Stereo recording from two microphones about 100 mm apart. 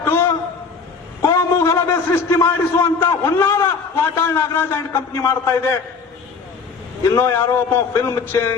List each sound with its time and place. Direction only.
0.0 s a sound: 25° left (ahead or behind)
1.4 s a man's voice: 25° left (ahead or behind)
7.2 s a man's voice: 25° left (ahead or behind)